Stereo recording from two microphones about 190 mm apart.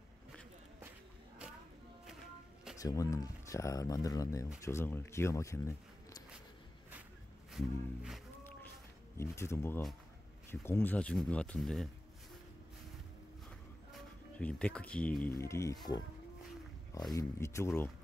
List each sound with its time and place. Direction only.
2.8 s speech: 20° left (ahead or behind)
7.5 s music: centre (ahead or behind)
9.1 s speech: 15° left (ahead or behind)
13.9 s speech: 5° left (ahead or behind)
17.1 s speech: 15° left (ahead or behind)